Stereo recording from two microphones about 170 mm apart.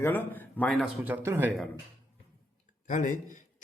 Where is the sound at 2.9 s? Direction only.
50° left (ahead or behind).